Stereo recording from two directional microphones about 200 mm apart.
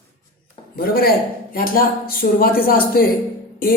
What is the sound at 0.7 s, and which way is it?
A woman's voice, 50° left (ahead or behind).